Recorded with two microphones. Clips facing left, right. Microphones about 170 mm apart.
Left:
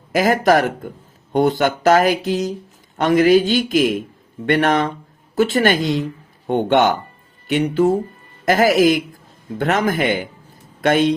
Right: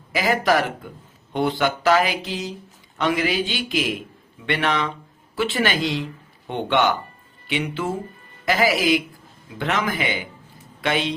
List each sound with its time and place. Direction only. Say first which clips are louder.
0.1 s speech: left 5 dB; 45° left (ahead or behind)